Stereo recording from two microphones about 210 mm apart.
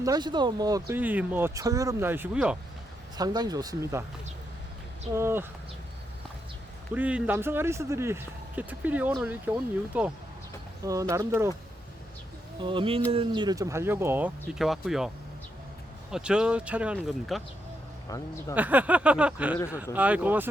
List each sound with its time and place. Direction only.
0.0 s speech: 20° right (ahead or behind)
3.2 s speech: 20° right (ahead or behind)
5.1 s speech: 10° right (ahead or behind)
6.9 s speech: 5° right (ahead or behind)
11.1 s speech: 15° right (ahead or behind)
12.5 s music: 25° right (ahead or behind)
13.1 s speech: 25° right (ahead or behind); by 15.1 s centre (ahead or behind)
16.1 s speech: 5° right (ahead or behind)
18.1 s speech: 15° left (ahead or behind)
18.5 s speech: 5° right (ahead or behind)